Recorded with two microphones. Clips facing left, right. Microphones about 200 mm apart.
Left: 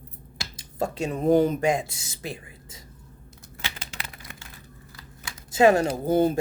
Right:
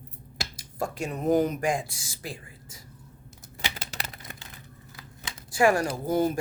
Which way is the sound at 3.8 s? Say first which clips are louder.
Right 2 dB; 40° right (ahead or behind).